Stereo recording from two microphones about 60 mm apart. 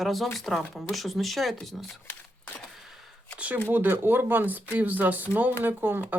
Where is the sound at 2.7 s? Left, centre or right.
Centre.